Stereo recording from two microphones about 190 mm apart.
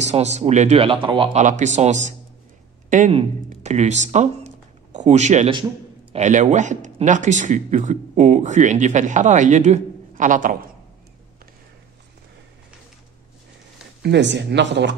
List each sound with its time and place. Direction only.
0.0 s speech: 35° right (ahead or behind)
1.4 s speech: 40° right (ahead or behind)
14.0 s speech: 65° right (ahead or behind)